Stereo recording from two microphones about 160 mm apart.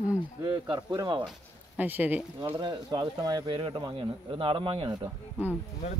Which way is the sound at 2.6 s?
25° right (ahead or behind).